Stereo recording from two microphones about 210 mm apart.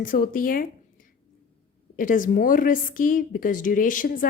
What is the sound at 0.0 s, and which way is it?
A woman's voice, 40° left (ahead or behind).